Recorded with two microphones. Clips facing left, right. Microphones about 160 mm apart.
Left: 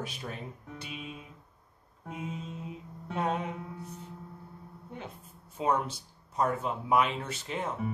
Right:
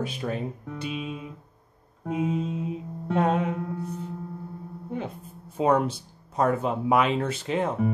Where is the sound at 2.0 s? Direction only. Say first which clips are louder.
Right 12 dB; 80° right.